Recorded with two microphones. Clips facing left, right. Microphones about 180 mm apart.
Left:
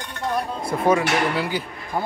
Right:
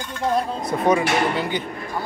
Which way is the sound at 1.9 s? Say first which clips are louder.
Left 4 dB; 55° left (ahead or behind).